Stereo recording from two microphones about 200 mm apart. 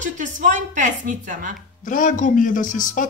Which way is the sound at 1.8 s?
40° left (ahead or behind).